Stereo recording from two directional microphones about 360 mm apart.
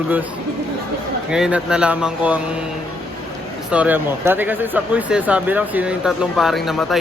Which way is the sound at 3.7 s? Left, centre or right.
Centre.